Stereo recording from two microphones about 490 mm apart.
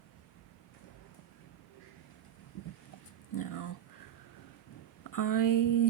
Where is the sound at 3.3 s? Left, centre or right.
Left.